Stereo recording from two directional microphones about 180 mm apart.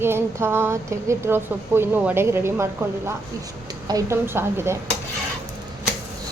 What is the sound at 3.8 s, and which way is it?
Speech, 15° right (ahead or behind).